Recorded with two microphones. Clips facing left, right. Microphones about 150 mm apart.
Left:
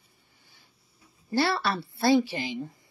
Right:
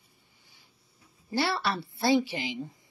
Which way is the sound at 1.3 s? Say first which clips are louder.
Left 3 dB; 15° right (ahead or behind).